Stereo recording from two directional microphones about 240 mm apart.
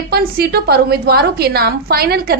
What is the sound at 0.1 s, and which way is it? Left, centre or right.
A woman's voice, right.